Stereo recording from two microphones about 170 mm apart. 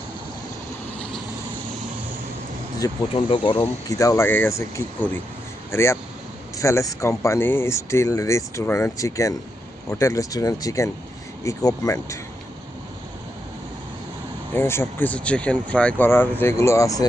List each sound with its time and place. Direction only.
3.1 s speech: 30° left (ahead or behind)
3.8 s speech: 20° left (ahead or behind)
14.5 s speech: 15° left (ahead or behind)